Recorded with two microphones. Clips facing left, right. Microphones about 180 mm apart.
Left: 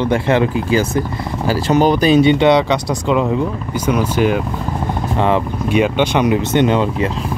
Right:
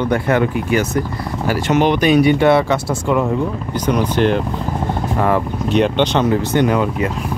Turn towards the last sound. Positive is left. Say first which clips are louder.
# left 1 dB
turn(degrees=25)  # may be behind; listen again after turning